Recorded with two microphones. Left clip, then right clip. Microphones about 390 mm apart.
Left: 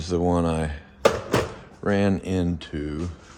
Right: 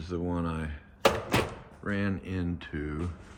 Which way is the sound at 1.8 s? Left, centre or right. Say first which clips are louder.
Left 10 dB; centre.